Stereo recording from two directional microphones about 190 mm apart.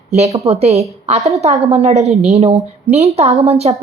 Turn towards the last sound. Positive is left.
turn(degrees=-35)  # may be behind; listen again after turning